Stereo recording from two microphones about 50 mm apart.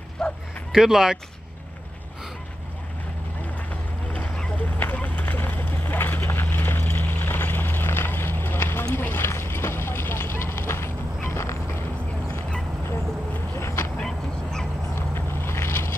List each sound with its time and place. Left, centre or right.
0.2 s bow-wow: centre
0.7 s speech: centre
4.6 s vehicle: left
13.6 s vehicle: left
14.0 s honk: centre
15.0 s vehicle: left